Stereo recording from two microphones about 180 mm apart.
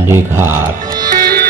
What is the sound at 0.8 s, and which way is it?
Music, 50° right (ahead or behind).